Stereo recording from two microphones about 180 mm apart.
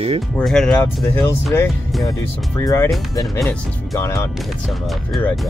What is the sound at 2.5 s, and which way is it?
Speech, 15° left (ahead or behind).